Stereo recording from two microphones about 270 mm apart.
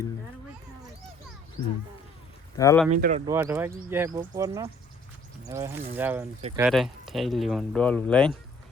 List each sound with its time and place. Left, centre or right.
2.6 s speech: centre
2.9 s speech: right
3.2 s speech: centre